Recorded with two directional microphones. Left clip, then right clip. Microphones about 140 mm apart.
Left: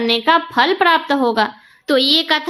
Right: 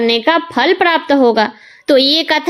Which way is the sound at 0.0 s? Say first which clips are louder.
Right 2 dB; 40° right (ahead or behind).